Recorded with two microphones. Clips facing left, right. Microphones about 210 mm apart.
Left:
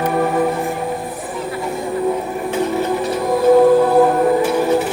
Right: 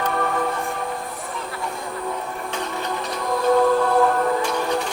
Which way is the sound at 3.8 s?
15° left (ahead or behind).